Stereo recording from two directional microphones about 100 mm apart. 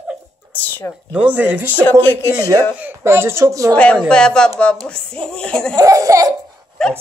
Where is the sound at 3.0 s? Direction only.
25° right (ahead or behind).